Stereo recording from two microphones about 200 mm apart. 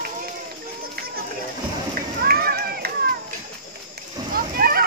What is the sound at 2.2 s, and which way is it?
Run, 50° right (ahead or behind).